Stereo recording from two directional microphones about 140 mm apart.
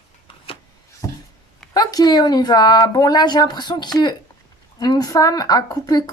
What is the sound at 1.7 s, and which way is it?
Speech, 25° left (ahead or behind).